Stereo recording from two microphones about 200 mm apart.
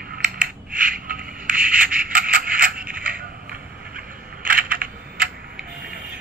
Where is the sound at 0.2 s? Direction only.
40° right (ahead or behind).